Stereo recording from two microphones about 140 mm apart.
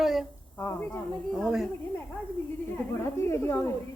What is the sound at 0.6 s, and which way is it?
Speech, 15° left (ahead or behind).